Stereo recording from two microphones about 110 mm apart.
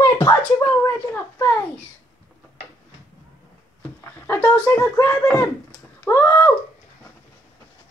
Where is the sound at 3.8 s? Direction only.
15° left (ahead or behind).